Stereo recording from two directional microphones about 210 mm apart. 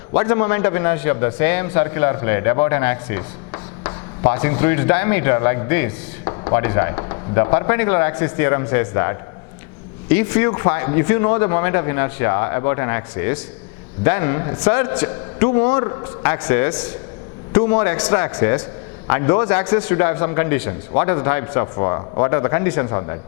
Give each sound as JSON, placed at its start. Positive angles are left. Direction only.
{"t": 0.1, "sound": "a man's voice", "side_deg": 10}
{"t": 16.0, "sound": "a man's voice", "side_deg": 10}